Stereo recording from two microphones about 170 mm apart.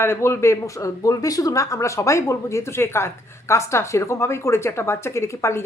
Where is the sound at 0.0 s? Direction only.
15° left (ahead or behind).